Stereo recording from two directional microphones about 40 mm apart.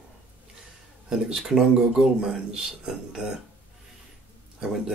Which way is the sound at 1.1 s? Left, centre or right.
Centre.